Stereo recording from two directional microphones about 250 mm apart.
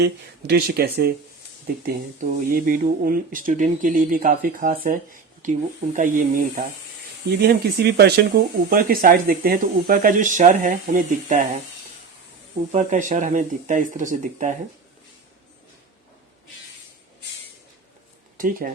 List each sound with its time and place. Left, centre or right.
0.0 s speech: right
12.7 s speech: right
18.3 s speech: right